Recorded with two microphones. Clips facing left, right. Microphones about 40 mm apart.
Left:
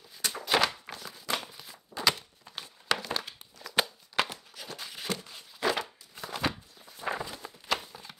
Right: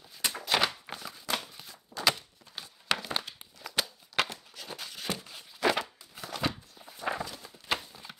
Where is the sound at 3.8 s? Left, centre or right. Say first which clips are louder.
Left 4 dB; left.